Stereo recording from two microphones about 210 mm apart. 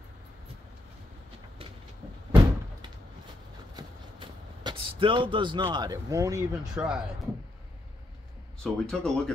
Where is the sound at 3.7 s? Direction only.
20° right (ahead or behind).